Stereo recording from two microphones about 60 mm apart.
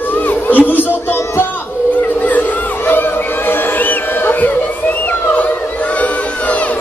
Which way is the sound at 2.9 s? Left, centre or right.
Left.